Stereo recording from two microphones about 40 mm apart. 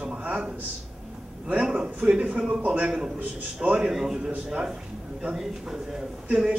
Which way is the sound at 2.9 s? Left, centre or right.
Centre.